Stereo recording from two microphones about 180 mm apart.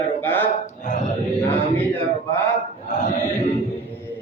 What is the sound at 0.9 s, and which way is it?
Chant, 40° left (ahead or behind).